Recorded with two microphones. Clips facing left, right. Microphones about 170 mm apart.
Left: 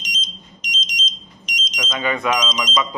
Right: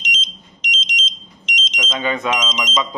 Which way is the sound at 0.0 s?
25° right (ahead or behind).